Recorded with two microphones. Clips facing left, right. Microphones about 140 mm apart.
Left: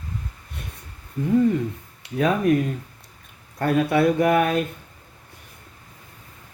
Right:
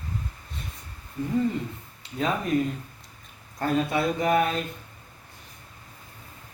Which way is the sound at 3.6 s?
60° left (ahead or behind).